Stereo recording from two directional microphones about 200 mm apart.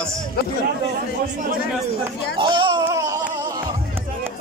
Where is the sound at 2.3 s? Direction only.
25° right (ahead or behind).